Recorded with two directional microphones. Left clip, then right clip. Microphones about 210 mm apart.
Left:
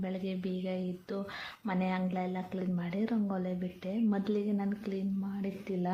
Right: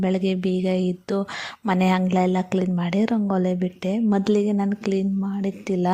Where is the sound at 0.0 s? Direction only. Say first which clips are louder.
Right 14 dB; 45° right (ahead or behind).